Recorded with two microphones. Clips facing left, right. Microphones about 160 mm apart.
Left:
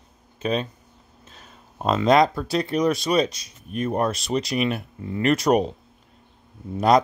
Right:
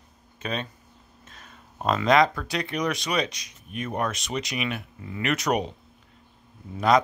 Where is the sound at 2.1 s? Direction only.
40° left (ahead or behind).